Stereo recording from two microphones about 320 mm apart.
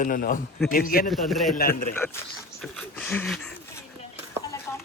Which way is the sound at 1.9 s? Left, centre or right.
Centre.